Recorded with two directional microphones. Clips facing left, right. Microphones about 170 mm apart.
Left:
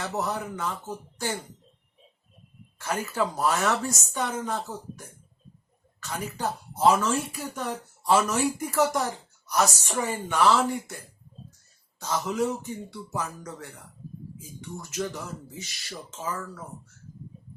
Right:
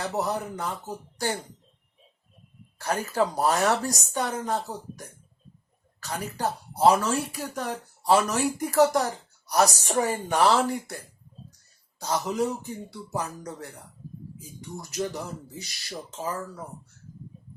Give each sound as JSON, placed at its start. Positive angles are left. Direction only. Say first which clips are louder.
{"t": 0.2, "sound": "speech", "louder": "right 1 dB", "side_deg": -35}
{"t": 2.7, "sound": "speech", "louder": "right 3 dB", "side_deg": -35}
{"t": 6.0, "sound": "speech", "louder": "right 2 dB", "side_deg": -35}
{"t": 11.9, "sound": "speech", "louder": "right 1 dB", "side_deg": -35}